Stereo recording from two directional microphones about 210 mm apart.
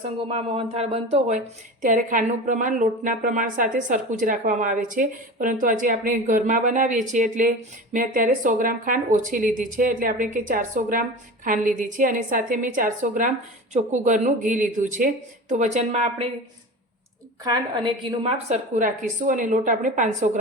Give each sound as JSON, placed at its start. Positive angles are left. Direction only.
{"t": 0.3, "sound": "a woman's voice", "side_deg": -30}
{"t": 17.4, "sound": "a woman's voice", "side_deg": -20}